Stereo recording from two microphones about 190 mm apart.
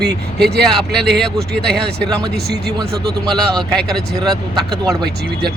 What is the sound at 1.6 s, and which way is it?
Speech, 5° left (ahead or behind).